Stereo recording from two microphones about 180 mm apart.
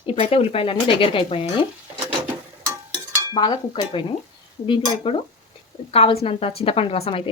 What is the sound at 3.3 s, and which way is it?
Speech, 25° left (ahead or behind).